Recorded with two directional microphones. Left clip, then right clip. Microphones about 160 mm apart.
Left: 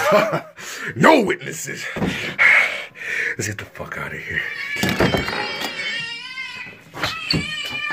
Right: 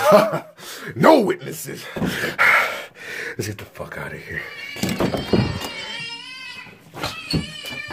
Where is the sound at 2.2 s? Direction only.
40° right (ahead or behind).